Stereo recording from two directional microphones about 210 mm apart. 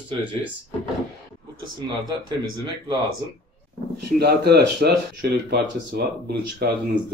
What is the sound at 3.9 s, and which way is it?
Speech, 50° right (ahead or behind).